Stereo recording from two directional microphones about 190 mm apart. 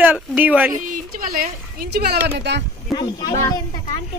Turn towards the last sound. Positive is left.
turn(degrees=20)  # may be behind; listen again after turning